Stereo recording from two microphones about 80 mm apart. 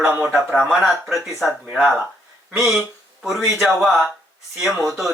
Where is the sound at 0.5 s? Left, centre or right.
Centre.